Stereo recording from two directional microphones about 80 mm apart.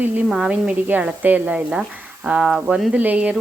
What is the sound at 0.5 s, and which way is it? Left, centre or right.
Speech, centre.